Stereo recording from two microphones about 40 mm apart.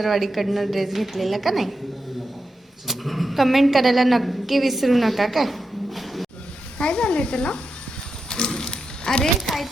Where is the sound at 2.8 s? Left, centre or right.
Centre.